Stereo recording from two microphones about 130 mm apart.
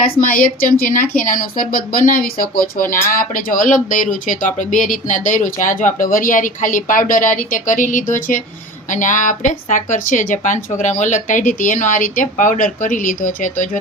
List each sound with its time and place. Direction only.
0.2 s a woman's voice: 90° left